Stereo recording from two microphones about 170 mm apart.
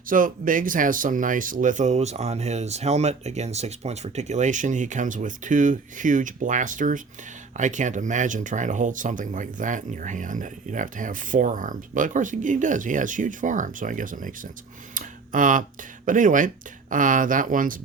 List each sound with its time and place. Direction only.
0.1 s speech: 55° right (ahead or behind)